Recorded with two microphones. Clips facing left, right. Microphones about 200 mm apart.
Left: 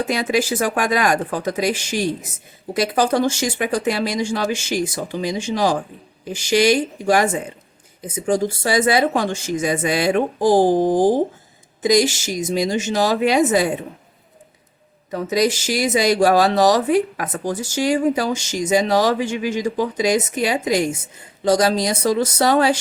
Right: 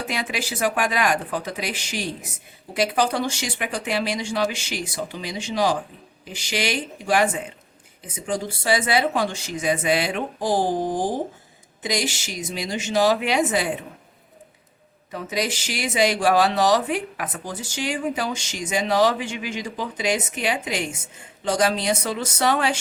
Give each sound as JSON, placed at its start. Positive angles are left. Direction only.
{"t": 0.1, "sound": "speech", "side_deg": 40}
{"t": 15.1, "sound": "speech", "side_deg": 40}